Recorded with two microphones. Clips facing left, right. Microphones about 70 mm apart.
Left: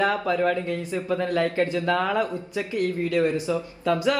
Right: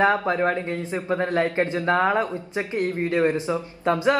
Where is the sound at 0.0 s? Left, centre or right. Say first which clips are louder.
Right 2 dB; right.